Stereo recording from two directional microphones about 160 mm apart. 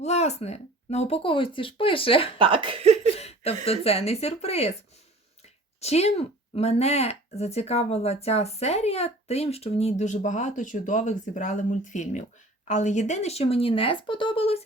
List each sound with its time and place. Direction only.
0.0 s speech: 45° left (ahead or behind)
2.4 s speech: 35° right (ahead or behind)
3.2 s speech: 40° left (ahead or behind)
5.8 s speech: 40° left (ahead or behind)